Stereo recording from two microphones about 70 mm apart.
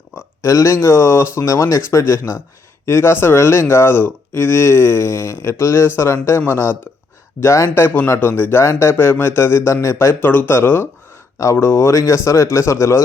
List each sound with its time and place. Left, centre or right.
0.4 s speech: left
7.9 s speech: left
10.2 s speech: left